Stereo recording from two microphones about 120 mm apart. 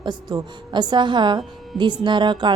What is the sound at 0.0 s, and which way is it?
A woman's voice, 35° right (ahead or behind).